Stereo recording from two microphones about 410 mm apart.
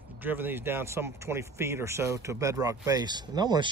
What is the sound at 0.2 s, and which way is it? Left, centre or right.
Speech, centre.